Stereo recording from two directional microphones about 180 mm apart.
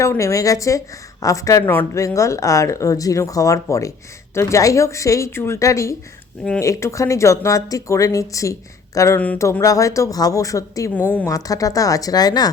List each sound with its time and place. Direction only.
0.0 s a woman's voice: 15° left (ahead or behind)